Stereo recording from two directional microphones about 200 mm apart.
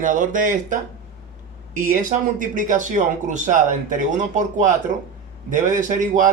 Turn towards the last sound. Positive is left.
turn(degrees=-40)  # may be behind; listen again after turning